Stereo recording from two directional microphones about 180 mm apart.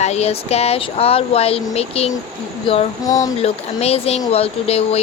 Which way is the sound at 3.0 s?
20° left (ahead or behind).